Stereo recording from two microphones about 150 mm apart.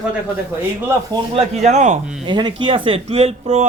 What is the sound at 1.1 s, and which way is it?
Speech, 25° right (ahead or behind).